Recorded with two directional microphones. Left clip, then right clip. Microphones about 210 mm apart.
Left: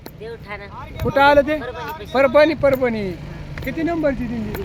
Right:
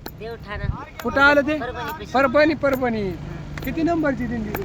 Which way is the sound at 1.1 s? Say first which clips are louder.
Left 3 dB; 10° left (ahead or behind).